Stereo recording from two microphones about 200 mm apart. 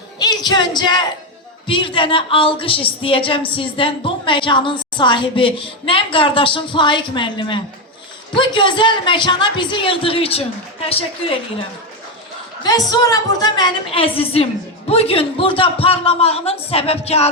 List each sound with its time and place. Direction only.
0.2 s a woman's voice: 20° left (ahead or behind)
12.6 s a woman's voice: 20° left (ahead or behind)